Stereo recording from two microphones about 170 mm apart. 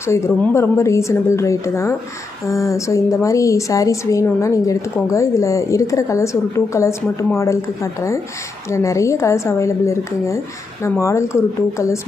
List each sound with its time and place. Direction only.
0.0 s a woman's voice: 15° left (ahead or behind)